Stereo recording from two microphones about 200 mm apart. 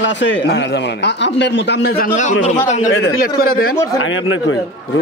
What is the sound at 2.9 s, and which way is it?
Speech, 85° left.